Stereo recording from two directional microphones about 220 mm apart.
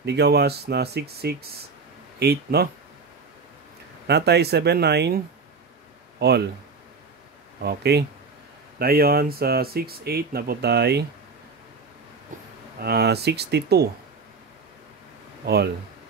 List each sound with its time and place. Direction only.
0.0 s speech: 50° right (ahead or behind)
4.1 s speech: 50° right (ahead or behind)
7.6 s speech: 50° right (ahead or behind)
12.8 s speech: 45° right (ahead or behind)
15.4 s speech: 50° right (ahead or behind)